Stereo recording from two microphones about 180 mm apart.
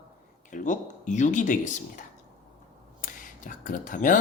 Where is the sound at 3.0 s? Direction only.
45° left (ahead or behind).